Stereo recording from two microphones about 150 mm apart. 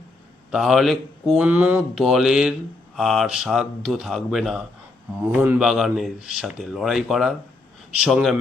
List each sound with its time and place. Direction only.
0.5 s speech: centre (ahead or behind)
5.3 s speech: 15° right (ahead or behind)
5.5 s speech: 5° right (ahead or behind)